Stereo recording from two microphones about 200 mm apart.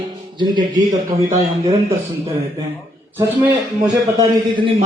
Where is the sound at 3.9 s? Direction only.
20° right (ahead or behind).